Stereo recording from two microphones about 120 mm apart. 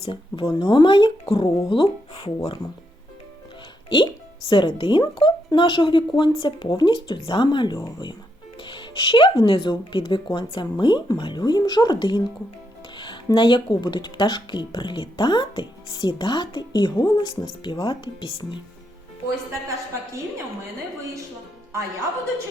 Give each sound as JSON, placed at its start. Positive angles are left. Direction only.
{"t": 0.0, "sound": "speech", "side_deg": 50}
{"t": 3.8, "sound": "speech", "side_deg": 40}